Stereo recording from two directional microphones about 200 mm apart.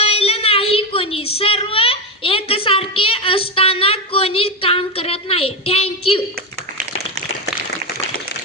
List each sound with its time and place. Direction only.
0.0 s child singing: 30° left (ahead or behind)